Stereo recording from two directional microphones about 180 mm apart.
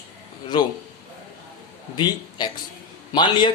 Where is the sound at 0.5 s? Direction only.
25° left (ahead or behind).